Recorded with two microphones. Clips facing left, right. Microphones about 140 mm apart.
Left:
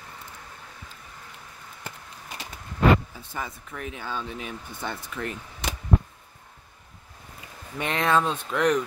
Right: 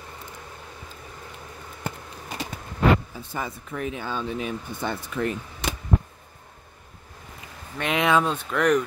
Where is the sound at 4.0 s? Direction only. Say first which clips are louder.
Right 3 dB; 25° right (ahead or behind).